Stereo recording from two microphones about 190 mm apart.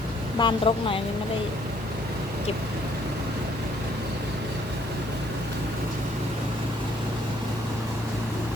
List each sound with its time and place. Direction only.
0.3 s a woman's voice: 25° left (ahead or behind)